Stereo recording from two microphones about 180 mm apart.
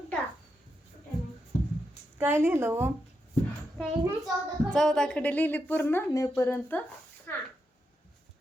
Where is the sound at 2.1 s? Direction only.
10° right (ahead or behind).